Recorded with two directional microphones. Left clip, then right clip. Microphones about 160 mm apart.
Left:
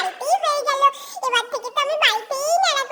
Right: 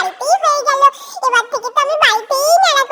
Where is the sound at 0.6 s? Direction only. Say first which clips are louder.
Right 6 dB; 20° right (ahead or behind).